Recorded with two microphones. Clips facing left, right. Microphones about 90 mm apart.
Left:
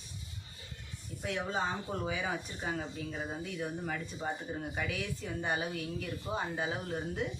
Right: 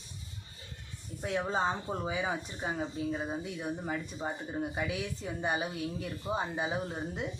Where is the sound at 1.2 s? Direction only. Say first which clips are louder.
Right 3 dB; 30° right (ahead or behind).